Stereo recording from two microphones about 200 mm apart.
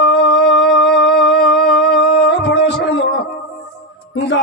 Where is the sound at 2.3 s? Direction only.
60° left (ahead or behind).